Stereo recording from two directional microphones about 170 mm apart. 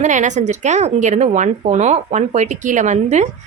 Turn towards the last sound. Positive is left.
turn(degrees=-45)  # may be behind; listen again after turning